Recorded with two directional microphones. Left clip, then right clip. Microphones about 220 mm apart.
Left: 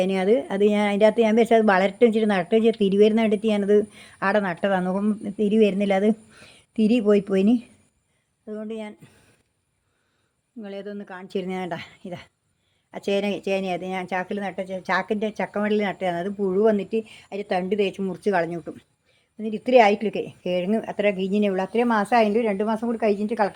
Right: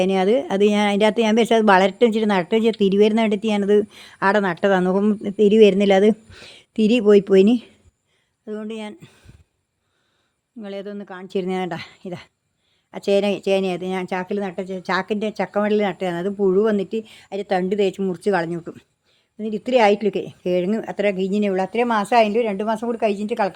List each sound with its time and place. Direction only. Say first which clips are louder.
0.0 s speech: right 3 dB; 35° right (ahead or behind)
10.6 s a woman's voice: right 3 dB; 30° right (ahead or behind)